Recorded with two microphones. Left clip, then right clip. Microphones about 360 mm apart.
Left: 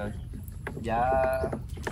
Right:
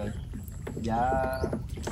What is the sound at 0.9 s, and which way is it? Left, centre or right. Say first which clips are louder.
Speech: left 2 dB; left.